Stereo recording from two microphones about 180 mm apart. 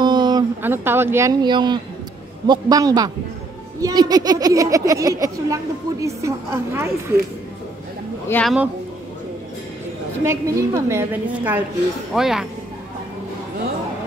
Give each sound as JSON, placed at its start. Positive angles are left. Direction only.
{"t": 0.0, "sound": "a sound", "side_deg": -25}
{"t": 0.6, "sound": "a woman's voice", "side_deg": -10}
{"t": 8.3, "sound": "speech", "side_deg": 5}
{"t": 10.2, "sound": "a woman's voice", "side_deg": -15}